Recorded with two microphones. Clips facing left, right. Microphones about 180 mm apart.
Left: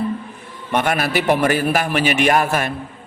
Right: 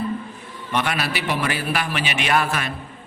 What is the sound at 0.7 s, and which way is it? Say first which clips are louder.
A man's voice: left 5 dB; 50° left (ahead or behind).